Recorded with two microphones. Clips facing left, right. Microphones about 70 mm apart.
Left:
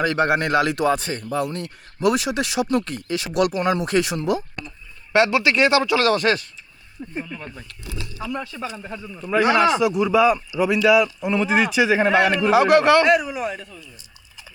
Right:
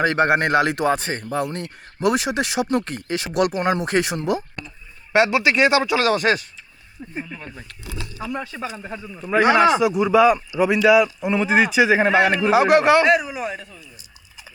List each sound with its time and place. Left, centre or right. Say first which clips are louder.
0.0 s speech: right 2 dB; right
5.1 s speech: even; centre
8.2 s speech: even; right
9.3 s speech: right 2 dB; right
9.8 s speech: right 2 dB; centre
13.1 s a man's voice: even; centre